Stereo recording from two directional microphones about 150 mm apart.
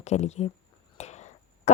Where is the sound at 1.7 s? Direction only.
45° left (ahead or behind).